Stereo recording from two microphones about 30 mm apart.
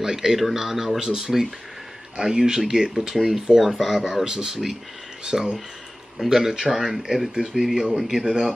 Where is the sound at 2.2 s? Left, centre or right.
Right.